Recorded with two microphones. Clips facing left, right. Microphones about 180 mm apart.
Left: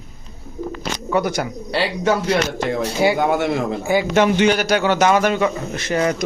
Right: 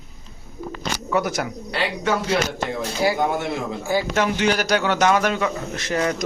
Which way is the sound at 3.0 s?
25° left (ahead or behind).